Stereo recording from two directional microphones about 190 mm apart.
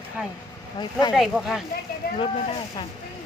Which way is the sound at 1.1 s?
Centre (ahead or behind).